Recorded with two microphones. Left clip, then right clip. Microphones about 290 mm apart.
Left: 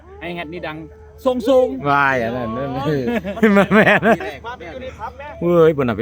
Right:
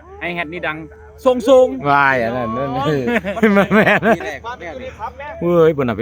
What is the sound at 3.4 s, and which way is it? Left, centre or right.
Speech, centre.